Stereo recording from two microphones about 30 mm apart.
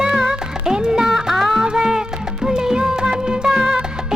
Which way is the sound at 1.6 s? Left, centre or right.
Right.